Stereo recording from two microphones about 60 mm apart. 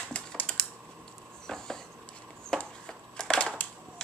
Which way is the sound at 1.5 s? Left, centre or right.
Centre.